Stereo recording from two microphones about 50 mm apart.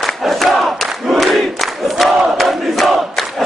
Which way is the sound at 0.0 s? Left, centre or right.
Centre.